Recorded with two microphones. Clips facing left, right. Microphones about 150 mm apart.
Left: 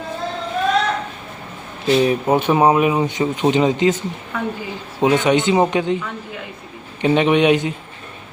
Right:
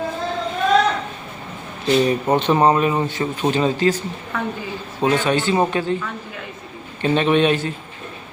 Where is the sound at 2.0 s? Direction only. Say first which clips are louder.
Left 1 dB; 5° left (ahead or behind).